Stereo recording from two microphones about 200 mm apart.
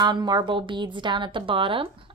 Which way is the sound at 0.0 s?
20° right (ahead or behind).